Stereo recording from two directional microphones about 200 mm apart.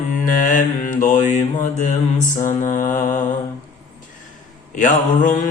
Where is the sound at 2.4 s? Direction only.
40° left (ahead or behind).